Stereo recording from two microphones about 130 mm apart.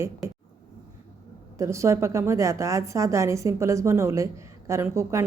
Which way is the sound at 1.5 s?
25° right (ahead or behind).